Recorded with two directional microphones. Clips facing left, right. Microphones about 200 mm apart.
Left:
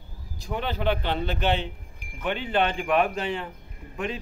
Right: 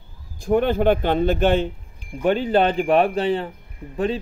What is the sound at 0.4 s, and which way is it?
A man's voice, 50° right (ahead or behind).